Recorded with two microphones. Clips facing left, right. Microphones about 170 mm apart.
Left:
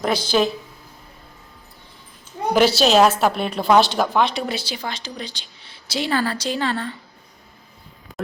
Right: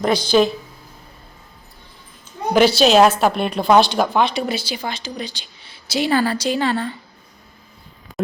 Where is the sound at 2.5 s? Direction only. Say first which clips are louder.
Right 2 dB; centre (ahead or behind).